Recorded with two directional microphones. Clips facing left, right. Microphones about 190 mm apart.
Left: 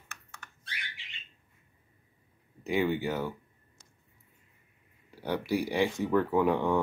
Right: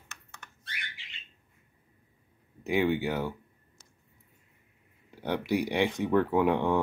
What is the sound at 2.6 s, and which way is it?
Speech, 15° right (ahead or behind).